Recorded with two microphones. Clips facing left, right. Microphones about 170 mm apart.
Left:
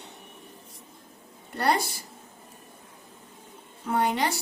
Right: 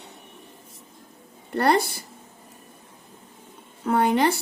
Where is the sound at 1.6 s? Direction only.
55° right (ahead or behind).